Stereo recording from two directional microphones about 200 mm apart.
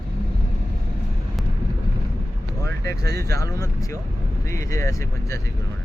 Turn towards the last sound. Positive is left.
turn(degrees=15)  # may be behind; listen again after turning